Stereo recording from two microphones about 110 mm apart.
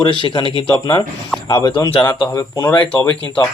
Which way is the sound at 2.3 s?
35° left (ahead or behind).